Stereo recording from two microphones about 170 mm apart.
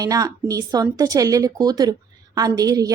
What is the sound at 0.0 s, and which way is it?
A woman's voice, 20° right (ahead or behind).